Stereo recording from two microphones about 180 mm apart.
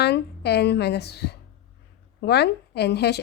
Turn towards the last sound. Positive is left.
turn(degrees=70)  # may be behind; listen again after turning